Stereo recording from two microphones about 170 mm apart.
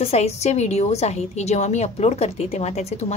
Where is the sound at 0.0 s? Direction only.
40° left (ahead or behind).